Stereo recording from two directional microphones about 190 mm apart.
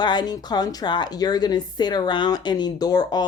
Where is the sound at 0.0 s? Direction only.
20° left (ahead or behind).